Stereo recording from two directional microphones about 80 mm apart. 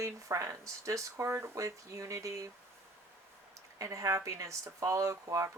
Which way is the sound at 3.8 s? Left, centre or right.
Right.